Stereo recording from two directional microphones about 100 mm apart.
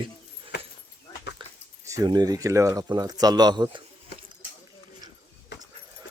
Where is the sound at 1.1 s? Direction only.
35° left (ahead or behind).